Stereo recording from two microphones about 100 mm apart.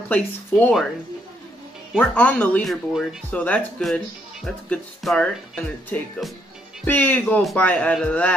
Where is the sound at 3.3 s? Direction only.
15° left (ahead or behind).